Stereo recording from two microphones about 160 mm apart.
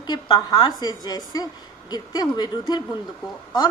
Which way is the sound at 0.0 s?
25° left (ahead or behind).